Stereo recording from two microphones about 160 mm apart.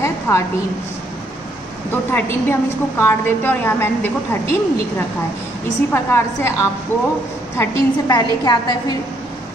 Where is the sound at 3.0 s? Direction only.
15° left (ahead or behind).